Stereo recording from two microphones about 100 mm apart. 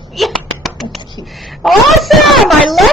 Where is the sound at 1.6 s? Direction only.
Centre (ahead or behind).